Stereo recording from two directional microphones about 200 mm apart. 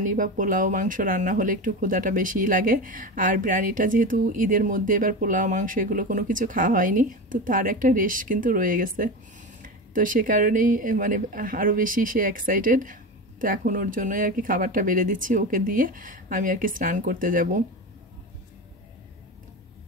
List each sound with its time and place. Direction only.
0.1 s speech: 40° right (ahead or behind)